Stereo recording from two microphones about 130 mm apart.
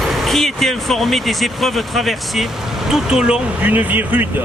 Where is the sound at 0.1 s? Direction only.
Centre (ahead or behind).